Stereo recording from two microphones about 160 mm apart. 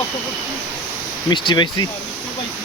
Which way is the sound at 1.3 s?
25° left (ahead or behind).